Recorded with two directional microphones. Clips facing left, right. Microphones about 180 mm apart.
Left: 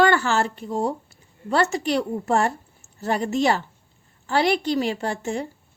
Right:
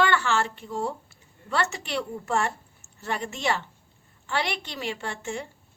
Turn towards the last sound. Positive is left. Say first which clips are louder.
# left 7 dB
turn(degrees=35)  # may be behind; listen again after turning